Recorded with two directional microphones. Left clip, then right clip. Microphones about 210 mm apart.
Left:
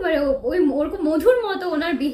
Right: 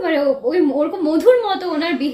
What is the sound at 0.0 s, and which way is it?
A woman's voice, 10° left (ahead or behind).